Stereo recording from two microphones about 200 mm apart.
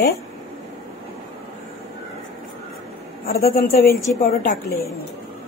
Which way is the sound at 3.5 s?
50° left (ahead or behind).